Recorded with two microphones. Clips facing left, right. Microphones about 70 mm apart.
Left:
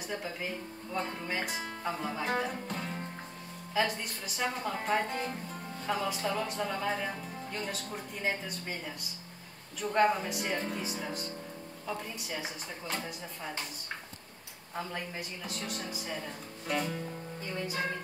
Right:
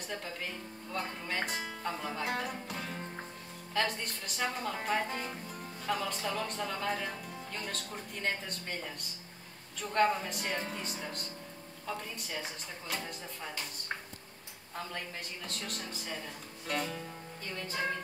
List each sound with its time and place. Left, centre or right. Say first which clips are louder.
0.1 s speech: left 3 dB; centre
14.8 s speech: left 3 dB; centre